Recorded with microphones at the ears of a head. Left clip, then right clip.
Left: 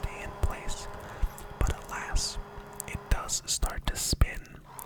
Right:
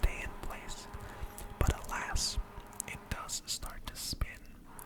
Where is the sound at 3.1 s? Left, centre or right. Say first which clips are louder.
Left 8 dB; left.